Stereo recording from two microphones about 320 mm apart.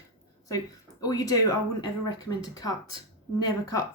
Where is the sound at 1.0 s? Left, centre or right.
Centre.